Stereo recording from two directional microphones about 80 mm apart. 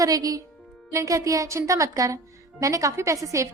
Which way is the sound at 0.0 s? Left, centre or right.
Right.